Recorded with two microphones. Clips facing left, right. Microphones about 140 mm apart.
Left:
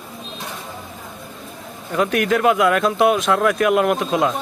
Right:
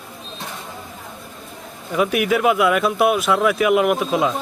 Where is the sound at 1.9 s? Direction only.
10° right (ahead or behind).